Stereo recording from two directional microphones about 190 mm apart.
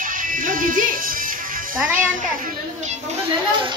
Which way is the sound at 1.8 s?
10° right (ahead or behind).